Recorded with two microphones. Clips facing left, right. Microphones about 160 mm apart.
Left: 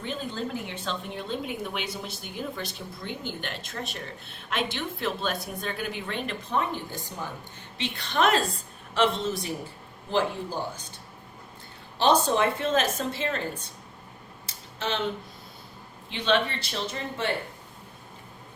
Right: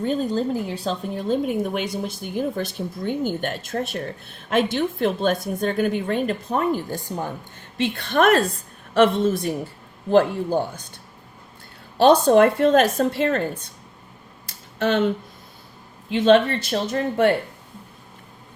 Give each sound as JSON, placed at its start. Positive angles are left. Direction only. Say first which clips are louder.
{"t": 0.0, "sound": "a woman's voice", "louder": "right 10 dB", "side_deg": -40}
{"t": 7.8, "sound": "a woman's voice", "louder": "right 6 dB", "side_deg": -55}
{"t": 11.9, "sound": "a woman's voice", "louder": "right 9 dB", "side_deg": -55}
{"t": 14.4, "sound": "a sound", "louder": "right 10 dB", "side_deg": -55}
{"t": 16.1, "sound": "a woman's voice", "louder": "right 10 dB", "side_deg": -45}